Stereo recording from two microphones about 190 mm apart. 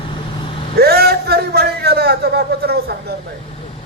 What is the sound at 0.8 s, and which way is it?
A man's voice, 55° right (ahead or behind).